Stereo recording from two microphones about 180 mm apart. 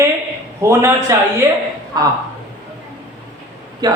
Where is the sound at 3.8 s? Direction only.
25° right (ahead or behind).